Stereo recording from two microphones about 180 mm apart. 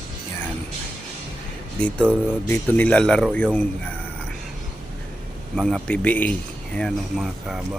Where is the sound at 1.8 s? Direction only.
5° left (ahead or behind).